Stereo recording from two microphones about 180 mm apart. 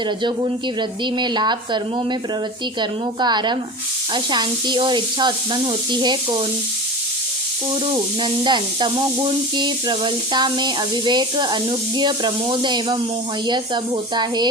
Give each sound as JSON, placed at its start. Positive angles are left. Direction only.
{"t": 0.2, "sound": "speech", "side_deg": -25}
{"t": 3.2, "sound": "speech", "side_deg": -25}
{"t": 7.9, "sound": "speech", "side_deg": -25}